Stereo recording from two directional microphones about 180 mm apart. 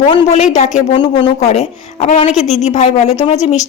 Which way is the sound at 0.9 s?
30° left (ahead or behind).